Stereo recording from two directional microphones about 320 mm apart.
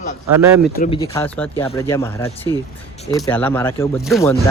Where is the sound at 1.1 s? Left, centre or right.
Centre.